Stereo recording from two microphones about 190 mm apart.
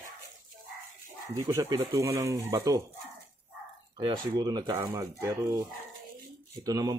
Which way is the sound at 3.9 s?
20° right (ahead or behind).